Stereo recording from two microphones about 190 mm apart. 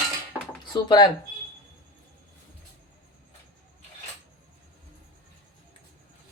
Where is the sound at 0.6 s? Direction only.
20° left (ahead or behind).